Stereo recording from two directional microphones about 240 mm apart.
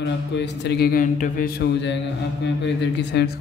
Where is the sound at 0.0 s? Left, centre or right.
Left.